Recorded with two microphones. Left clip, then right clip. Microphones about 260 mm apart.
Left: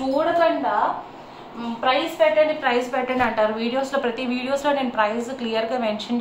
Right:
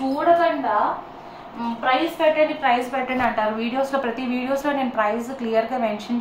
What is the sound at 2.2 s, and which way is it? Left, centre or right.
A woman's voice, centre.